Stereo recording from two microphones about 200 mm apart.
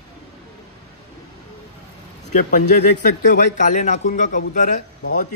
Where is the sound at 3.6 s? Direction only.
40° left (ahead or behind).